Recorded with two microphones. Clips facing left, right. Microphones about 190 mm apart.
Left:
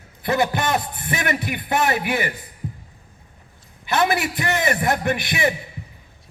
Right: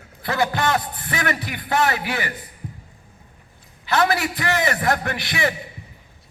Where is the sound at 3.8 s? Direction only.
20° left (ahead or behind).